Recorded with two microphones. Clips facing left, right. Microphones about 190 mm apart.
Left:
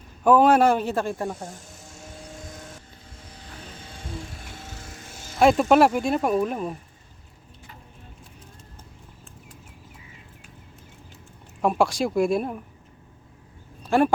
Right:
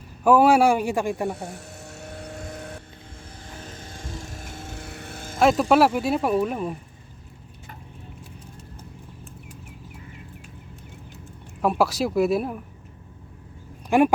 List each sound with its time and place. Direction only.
0.3 s a man's voice: 10° right (ahead or behind)
1.4 s a sound: 65° right (ahead or behind)
3.8 s music: 45° right (ahead or behind)
5.4 s speech: centre (ahead or behind)
11.6 s speech: 5° right (ahead or behind)
13.9 s a man's voice: 15° right (ahead or behind)